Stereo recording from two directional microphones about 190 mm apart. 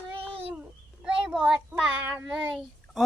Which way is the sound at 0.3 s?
30° right (ahead or behind).